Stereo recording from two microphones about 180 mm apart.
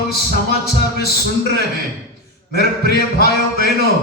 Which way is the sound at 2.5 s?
60° left (ahead or behind).